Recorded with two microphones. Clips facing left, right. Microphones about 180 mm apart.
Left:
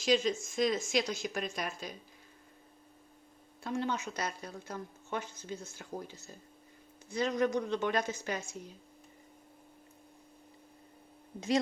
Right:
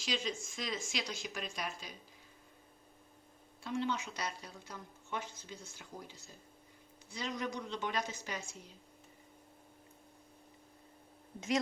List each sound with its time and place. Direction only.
0.0 s a woman's voice: 45° left (ahead or behind)
3.6 s a woman's voice: 45° left (ahead or behind)
7.1 s a woman's voice: 50° left (ahead or behind)
11.3 s speech: 30° left (ahead or behind)